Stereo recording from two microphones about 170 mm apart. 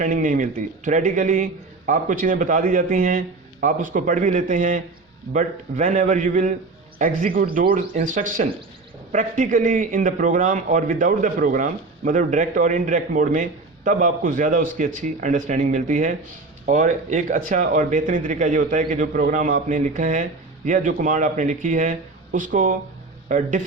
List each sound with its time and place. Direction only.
0.0 s a man's voice: 50° right (ahead or behind)